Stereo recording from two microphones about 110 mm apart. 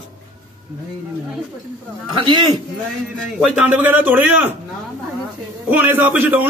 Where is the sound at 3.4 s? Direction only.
10° right (ahead or behind).